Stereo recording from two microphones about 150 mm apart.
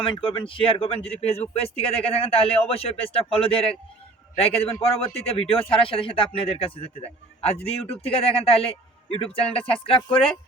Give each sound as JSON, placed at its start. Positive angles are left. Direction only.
{"t": 0.0, "sound": "a man's voice", "side_deg": 35}